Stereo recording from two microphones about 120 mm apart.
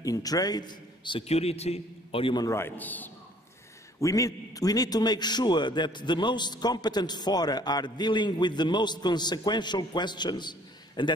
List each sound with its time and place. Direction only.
0.0 s a man's voice: 30° left (ahead or behind)
1.2 s a man's voice: 60° left (ahead or behind)
2.3 s a man's voice: 25° left (ahead or behind)
4.0 s a man's voice: 30° left (ahead or behind)